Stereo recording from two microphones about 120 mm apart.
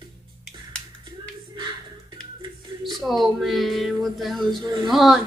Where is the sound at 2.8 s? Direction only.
Centre (ahead or behind).